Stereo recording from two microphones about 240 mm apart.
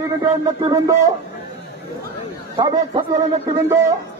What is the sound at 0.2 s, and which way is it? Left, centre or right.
Speech, centre.